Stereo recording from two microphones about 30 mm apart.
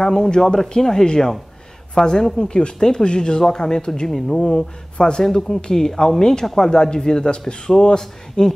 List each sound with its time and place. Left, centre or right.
0.0 s speech: centre
6.7 s speech: left